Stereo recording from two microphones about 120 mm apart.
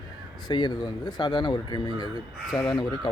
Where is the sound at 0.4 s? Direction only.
35° left (ahead or behind).